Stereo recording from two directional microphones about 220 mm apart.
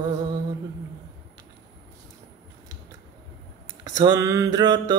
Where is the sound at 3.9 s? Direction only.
15° right (ahead or behind).